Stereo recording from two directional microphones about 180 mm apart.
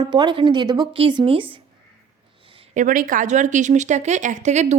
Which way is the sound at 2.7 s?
45° right (ahead or behind).